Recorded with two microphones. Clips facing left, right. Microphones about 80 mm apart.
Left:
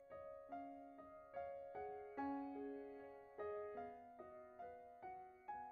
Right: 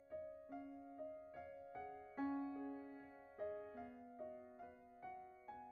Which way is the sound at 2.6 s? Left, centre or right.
Right.